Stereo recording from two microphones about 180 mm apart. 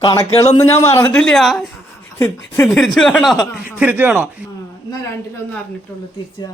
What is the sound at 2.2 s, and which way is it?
Speech, 15° left (ahead or behind).